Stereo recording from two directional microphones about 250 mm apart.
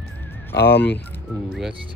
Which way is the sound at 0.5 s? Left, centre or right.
Left.